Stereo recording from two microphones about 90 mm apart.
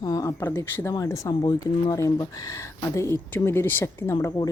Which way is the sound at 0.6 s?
25° left (ahead or behind).